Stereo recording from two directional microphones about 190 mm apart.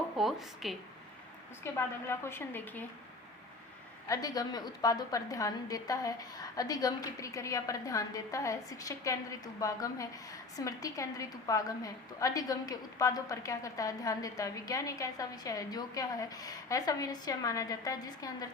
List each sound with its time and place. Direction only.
0.2 s a woman's voice: centre (ahead or behind)
1.6 s a woman's voice: 10° left (ahead or behind)
4.1 s a woman's voice: 20° left (ahead or behind)